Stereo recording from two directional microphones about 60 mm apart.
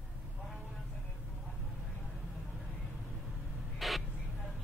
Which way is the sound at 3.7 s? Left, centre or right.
Centre.